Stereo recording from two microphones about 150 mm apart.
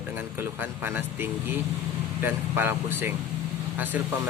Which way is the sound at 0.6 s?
15° right (ahead or behind).